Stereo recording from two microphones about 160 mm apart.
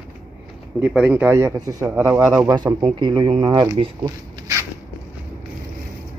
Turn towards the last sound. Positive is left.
turn(degrees=-25)  # may be behind; listen again after turning